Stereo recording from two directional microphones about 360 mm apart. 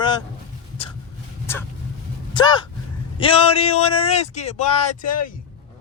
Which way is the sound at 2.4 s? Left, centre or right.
Centre.